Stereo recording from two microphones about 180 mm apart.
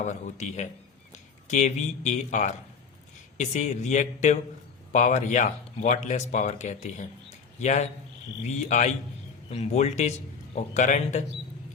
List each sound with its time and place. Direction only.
0.0 s speech: 40° left (ahead or behind)